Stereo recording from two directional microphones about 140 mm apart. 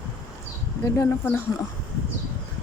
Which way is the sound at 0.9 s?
20° left (ahead or behind).